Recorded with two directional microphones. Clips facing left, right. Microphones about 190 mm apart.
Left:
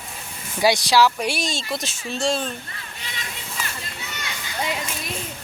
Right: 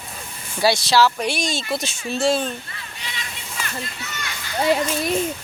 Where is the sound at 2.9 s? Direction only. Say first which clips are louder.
Right 2 dB; 45° left (ahead or behind).